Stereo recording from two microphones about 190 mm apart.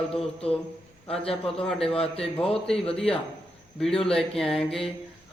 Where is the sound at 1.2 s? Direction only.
30° left (ahead or behind).